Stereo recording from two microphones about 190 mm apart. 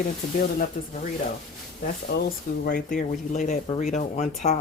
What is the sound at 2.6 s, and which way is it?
Speech, 45° left (ahead or behind).